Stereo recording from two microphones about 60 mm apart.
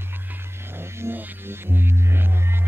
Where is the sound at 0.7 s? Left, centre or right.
Right.